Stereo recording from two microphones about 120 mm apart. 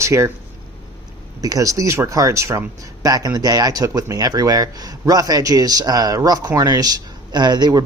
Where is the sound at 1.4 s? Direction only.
30° right (ahead or behind).